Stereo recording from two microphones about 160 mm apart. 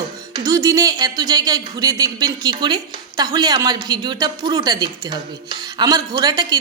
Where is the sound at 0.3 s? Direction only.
20° right (ahead or behind).